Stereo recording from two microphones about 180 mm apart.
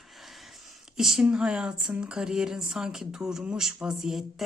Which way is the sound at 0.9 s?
Centre (ahead or behind).